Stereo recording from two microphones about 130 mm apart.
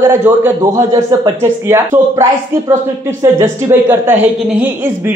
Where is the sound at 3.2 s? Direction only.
20° right (ahead or behind).